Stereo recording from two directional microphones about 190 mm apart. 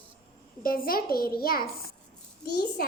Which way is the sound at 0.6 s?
50° left (ahead or behind).